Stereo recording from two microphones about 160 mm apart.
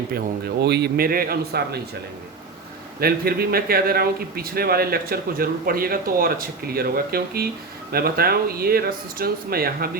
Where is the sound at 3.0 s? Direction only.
70° right (ahead or behind).